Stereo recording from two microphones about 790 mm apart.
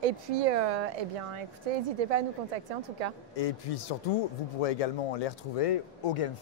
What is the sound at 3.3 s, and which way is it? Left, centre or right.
Speech, left.